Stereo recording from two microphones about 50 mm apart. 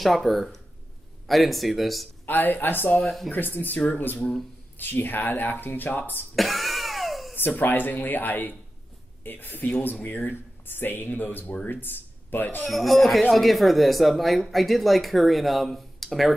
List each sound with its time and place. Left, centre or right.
0.0 s speech: centre
2.2 s speech: left
3.0 s speech: centre
3.3 s speech: left
6.3 s cough: centre
7.3 s speech: left
12.6 s speech: centre